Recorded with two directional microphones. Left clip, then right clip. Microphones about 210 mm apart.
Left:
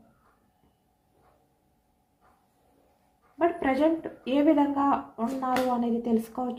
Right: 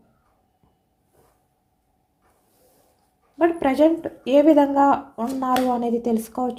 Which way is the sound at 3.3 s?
55° right (ahead or behind).